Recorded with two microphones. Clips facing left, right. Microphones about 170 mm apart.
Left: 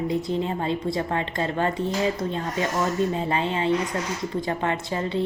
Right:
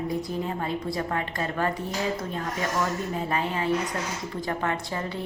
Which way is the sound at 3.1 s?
25° left (ahead or behind).